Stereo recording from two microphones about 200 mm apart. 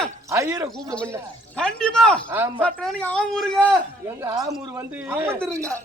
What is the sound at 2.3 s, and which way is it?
Speech, 10° right (ahead or behind).